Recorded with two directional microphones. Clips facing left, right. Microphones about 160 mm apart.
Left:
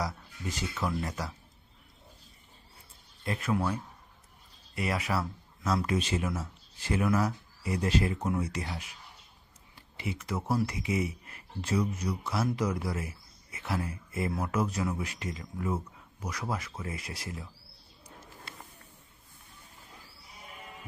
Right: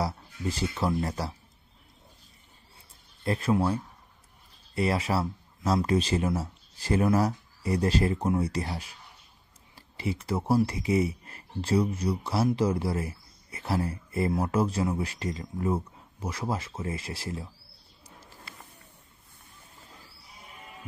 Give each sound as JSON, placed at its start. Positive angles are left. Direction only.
{"t": 0.0, "sound": "speech", "side_deg": -30}
{"t": 3.3, "sound": "speech", "side_deg": -30}